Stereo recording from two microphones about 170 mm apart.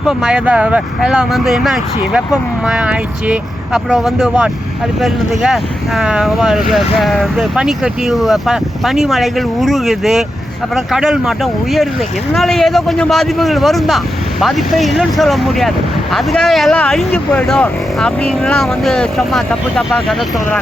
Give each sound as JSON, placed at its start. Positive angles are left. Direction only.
{"t": 0.2, "sound": "speech", "side_deg": -5}